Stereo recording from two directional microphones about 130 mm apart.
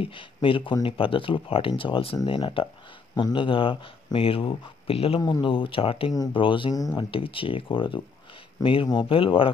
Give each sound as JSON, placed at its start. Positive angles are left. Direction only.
{"t": 0.0, "sound": "speech", "side_deg": 40}
{"t": 5.2, "sound": "speech", "side_deg": 35}
{"t": 6.7, "sound": "speech", "side_deg": 30}
{"t": 7.1, "sound": "speech", "side_deg": 45}